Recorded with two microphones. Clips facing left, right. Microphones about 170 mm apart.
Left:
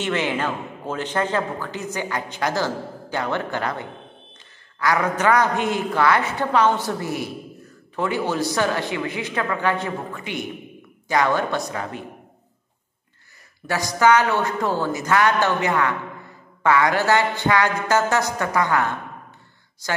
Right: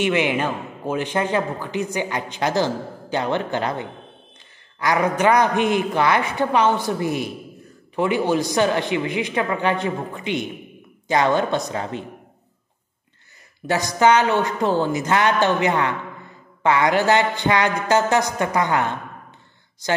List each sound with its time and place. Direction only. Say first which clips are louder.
0.0 s a man's voice: right 3 dB; 15° right (ahead or behind)
13.7 s a man's voice: right 1 dB; 20° right (ahead or behind)